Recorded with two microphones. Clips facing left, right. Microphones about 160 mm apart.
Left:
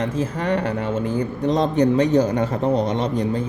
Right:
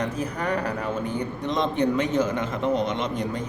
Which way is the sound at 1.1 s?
35° left (ahead or behind).